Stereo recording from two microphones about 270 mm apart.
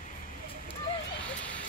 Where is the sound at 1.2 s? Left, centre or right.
Centre.